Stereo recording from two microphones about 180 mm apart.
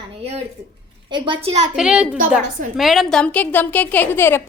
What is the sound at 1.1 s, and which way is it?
Speech, 30° right (ahead or behind).